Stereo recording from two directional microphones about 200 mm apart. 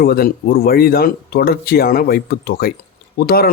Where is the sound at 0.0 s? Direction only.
50° left (ahead or behind).